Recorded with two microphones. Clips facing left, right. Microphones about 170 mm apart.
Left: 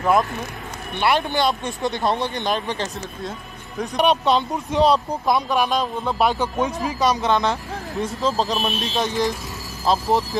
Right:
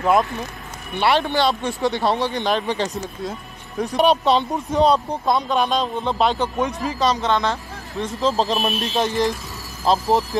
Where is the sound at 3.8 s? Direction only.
Centre (ahead or behind); by 7.6 s 15° left (ahead or behind).